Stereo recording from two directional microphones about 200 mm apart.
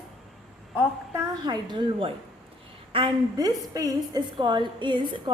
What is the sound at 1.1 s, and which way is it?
A child's voice, 20° right (ahead or behind).